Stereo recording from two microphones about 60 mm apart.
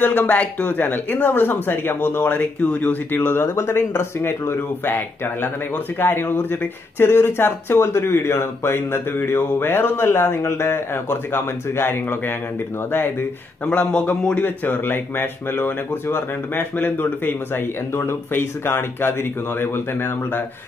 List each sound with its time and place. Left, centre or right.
0.0 s speech: left
2.2 s speech: left
3.4 s speech: left
13.7 s speech: centre
17.9 s speech: left